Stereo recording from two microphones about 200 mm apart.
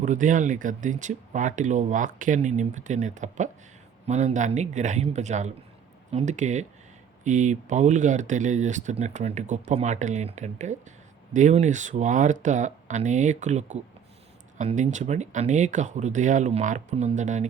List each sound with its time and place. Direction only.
0.0 s speech: 40° right (ahead or behind)